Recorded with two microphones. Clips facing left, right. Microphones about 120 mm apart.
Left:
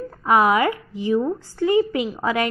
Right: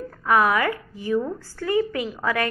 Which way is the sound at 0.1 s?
20° left (ahead or behind).